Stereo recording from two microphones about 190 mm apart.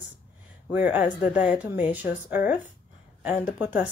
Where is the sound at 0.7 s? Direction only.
5° right (ahead or behind).